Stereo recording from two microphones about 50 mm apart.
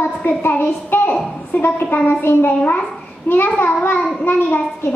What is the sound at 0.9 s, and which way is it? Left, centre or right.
A child's voice, left.